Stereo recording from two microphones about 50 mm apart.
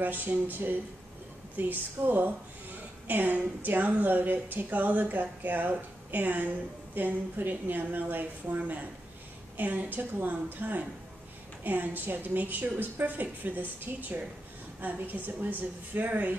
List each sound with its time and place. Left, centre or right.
0.0 s a woman's voice: right